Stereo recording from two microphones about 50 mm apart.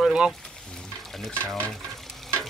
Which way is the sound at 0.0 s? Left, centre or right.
Centre.